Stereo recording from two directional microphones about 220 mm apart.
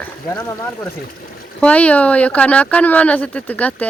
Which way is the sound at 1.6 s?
5° left (ahead or behind).